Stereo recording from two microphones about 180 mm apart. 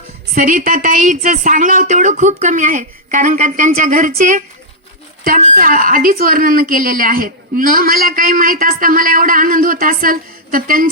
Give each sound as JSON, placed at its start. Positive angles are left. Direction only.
{"t": 0.3, "sound": "a woman's voice", "side_deg": -45}